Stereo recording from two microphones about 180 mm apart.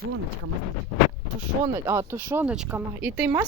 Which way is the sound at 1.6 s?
15° right (ahead or behind).